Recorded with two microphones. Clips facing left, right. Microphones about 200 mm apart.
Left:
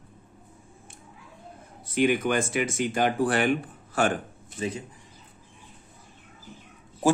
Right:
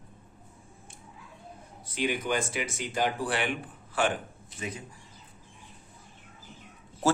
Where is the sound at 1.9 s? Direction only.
55° left (ahead or behind).